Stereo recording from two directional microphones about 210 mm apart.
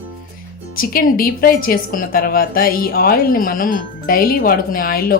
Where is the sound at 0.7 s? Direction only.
45° left (ahead or behind).